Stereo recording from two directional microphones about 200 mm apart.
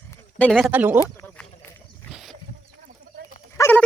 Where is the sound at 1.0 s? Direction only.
15° left (ahead or behind).